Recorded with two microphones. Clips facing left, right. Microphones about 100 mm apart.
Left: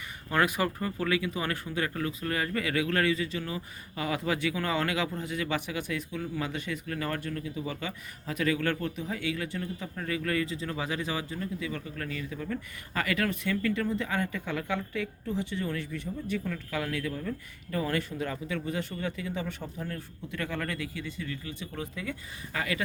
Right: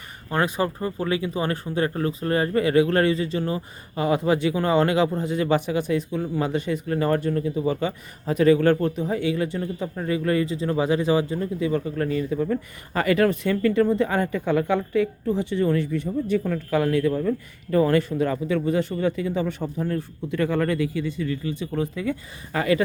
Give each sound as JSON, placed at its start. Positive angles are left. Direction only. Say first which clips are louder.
{"t": 0.3, "sound": "speech", "louder": "right 4 dB", "side_deg": -30}